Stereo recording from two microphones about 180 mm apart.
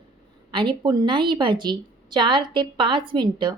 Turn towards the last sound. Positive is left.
turn(degrees=-25)  # may be behind; listen again after turning